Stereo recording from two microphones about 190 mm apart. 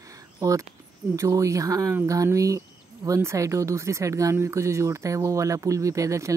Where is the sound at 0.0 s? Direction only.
20° right (ahead or behind).